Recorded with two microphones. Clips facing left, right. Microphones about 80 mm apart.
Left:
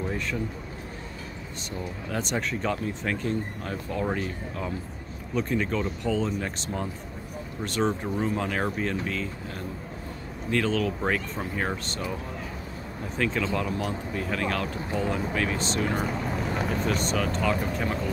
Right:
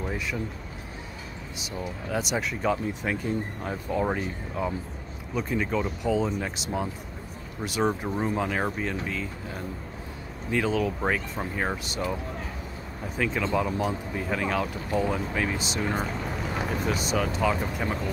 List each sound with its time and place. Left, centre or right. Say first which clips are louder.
0.0 s a sound: left 1 dB; centre
1.6 s speech: right 1 dB; centre
10.5 s speech: even; centre
13.2 s speech: right 1 dB; centre
15.9 s speech: left 1 dB; centre